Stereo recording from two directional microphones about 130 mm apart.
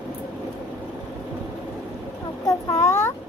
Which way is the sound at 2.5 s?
25° left (ahead or behind).